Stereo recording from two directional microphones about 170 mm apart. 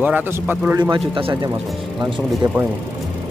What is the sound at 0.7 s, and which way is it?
Speech, 25° right (ahead or behind).